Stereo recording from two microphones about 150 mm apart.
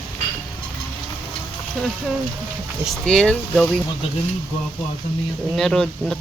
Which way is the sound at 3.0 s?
5° left (ahead or behind).